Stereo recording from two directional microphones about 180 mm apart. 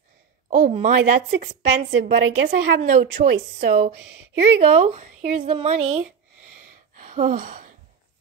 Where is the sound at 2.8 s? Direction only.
50° right (ahead or behind).